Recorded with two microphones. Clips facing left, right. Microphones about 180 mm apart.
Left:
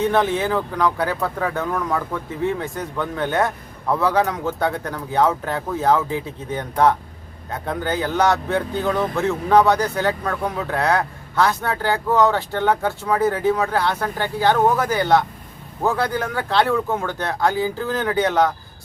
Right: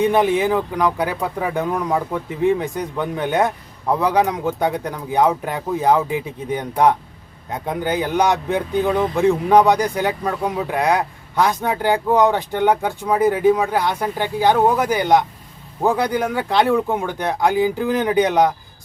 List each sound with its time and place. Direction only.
0.0 s speech: 15° right (ahead or behind)